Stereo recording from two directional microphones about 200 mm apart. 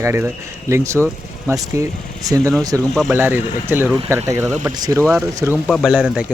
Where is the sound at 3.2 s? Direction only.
10° right (ahead or behind).